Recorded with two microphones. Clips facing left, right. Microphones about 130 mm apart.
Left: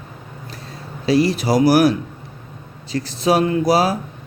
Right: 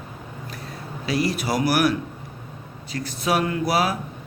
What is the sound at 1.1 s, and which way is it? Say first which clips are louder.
Speech: left 7 dB; 30° left (ahead or behind).